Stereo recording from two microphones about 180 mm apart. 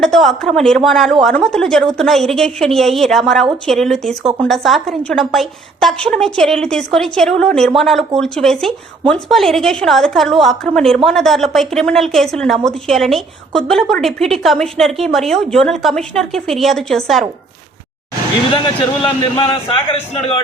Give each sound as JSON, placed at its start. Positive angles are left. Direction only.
{"t": 0.0, "sound": "a woman's voice", "side_deg": 0}
{"t": 18.5, "sound": "a man's voice", "side_deg": 25}